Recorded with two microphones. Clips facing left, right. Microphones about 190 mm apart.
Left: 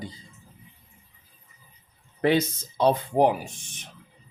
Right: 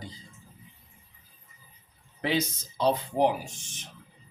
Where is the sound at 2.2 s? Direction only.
55° left (ahead or behind).